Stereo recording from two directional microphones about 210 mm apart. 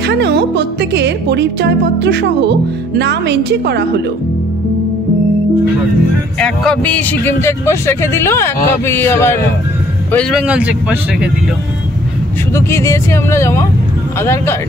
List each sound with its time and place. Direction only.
0.0 s speech: 55° right (ahead or behind)
6.4 s speech: 5° left (ahead or behind)
10.1 s speech: 5° right (ahead or behind)
12.5 s speech: 15° left (ahead or behind)